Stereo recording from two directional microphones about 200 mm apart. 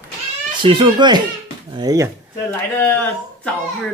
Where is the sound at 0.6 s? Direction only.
25° right (ahead or behind).